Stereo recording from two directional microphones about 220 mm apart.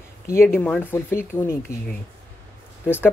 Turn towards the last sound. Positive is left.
turn(degrees=10)  # may be behind; listen again after turning